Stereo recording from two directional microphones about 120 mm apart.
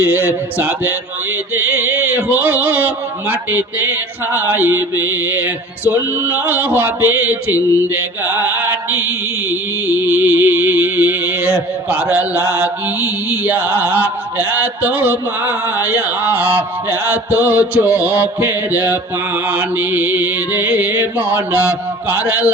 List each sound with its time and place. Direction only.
0.0 s speech: 15° right (ahead or behind)
9.8 s music: 15° right (ahead or behind)
19.5 s speech: 15° right (ahead or behind)